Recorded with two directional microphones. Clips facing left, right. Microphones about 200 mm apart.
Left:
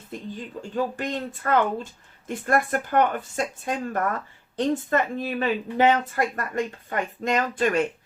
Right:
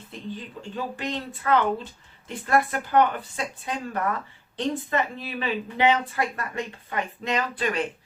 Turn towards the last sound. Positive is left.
turn(degrees=45)  # may be behind; listen again after turning